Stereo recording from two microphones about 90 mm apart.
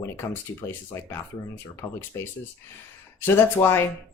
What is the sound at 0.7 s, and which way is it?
Speech, 25° left (ahead or behind).